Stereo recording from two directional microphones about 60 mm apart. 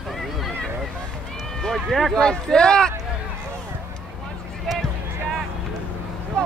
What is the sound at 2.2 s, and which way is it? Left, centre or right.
Speech, centre.